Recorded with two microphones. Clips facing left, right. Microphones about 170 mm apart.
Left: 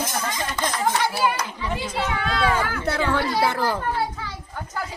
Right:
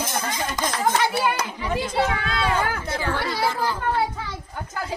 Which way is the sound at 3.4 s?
65° left (ahead or behind).